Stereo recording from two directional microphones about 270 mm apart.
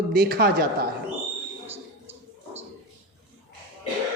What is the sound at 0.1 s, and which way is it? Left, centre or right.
Speech, right.